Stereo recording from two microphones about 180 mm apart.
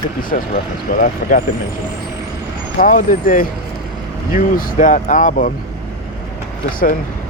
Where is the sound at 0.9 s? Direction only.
50° left (ahead or behind).